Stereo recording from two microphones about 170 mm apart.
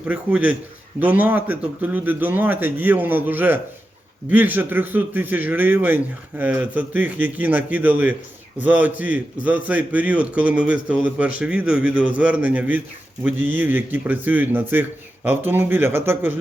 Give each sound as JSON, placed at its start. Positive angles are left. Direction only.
{"t": 0.0, "sound": "a man's voice", "side_deg": -10}